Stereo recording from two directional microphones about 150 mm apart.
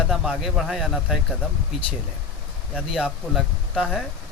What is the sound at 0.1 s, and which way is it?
Speech, centre (ahead or behind).